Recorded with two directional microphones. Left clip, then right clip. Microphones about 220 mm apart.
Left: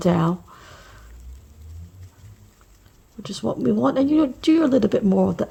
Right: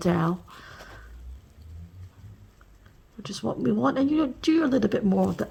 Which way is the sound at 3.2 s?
20° left (ahead or behind).